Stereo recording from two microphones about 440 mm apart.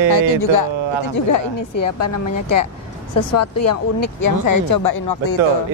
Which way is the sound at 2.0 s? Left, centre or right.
Left.